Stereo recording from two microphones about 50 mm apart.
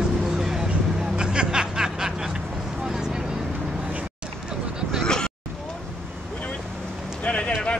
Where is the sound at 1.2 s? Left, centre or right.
Centre.